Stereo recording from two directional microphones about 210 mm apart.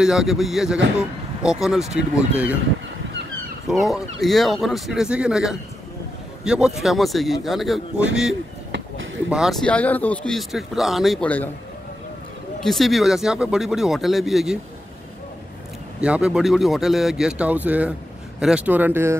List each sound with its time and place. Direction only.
0.0 s speech: 5° right (ahead or behind)
3.6 s speech: centre (ahead or behind)
8.7 s a sound: 65° right (ahead or behind)
9.3 s speech: centre (ahead or behind)
12.5 s speech: centre (ahead or behind)
16.0 s speech: 5° right (ahead or behind)